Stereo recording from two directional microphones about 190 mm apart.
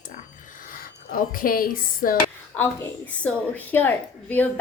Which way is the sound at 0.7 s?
50° left (ahead or behind).